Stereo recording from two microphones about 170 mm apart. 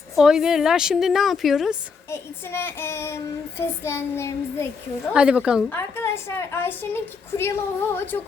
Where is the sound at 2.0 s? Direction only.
15° left (ahead or behind).